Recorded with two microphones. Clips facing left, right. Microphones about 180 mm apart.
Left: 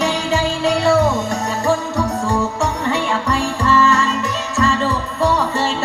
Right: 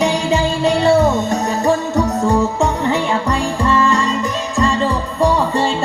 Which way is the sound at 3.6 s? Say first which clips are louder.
Even; 15° right (ahead or behind).